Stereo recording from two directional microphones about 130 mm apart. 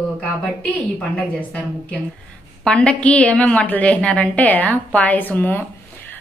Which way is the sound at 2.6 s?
10° left (ahead or behind).